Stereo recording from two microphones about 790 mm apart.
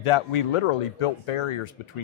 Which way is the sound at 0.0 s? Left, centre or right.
Left.